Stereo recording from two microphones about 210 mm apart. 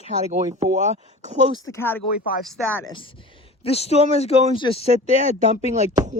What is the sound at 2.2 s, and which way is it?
Speech, 45° left (ahead or behind).